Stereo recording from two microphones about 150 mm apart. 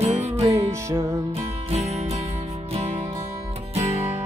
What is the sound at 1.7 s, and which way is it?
Music, 45° right (ahead or behind).